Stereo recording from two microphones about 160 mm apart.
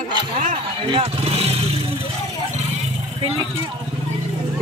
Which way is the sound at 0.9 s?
35° right (ahead or behind).